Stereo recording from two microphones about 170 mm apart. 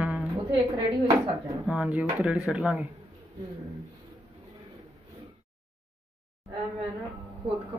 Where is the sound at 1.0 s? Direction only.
30° right (ahead or behind).